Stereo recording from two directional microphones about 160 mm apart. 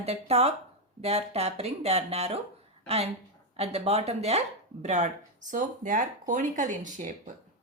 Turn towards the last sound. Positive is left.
turn(degrees=-50)  # may be behind; listen again after turning